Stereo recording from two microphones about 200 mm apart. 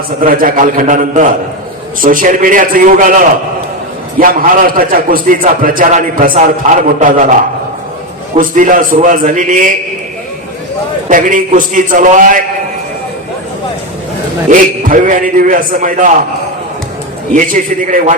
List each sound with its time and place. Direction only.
0.2 s a man's voice: 45° right (ahead or behind)
8.4 s a man's voice: 40° right (ahead or behind)
11.1 s a man's voice: 40° right (ahead or behind)
14.5 s a man's voice: 40° right (ahead or behind)
17.3 s a man's voice: 40° right (ahead or behind)